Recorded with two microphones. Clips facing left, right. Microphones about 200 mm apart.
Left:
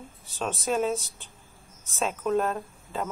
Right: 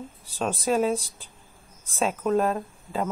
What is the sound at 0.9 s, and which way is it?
Speech, 30° right (ahead or behind).